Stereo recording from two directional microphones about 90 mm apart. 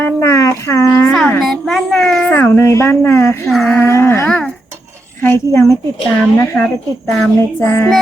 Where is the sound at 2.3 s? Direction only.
25° left (ahead or behind).